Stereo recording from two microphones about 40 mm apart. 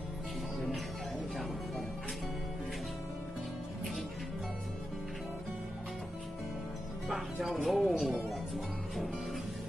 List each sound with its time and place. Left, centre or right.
7.4 s speech: centre